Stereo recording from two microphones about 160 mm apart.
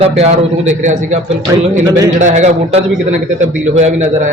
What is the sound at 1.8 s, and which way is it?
Speech, 20° right (ahead or behind).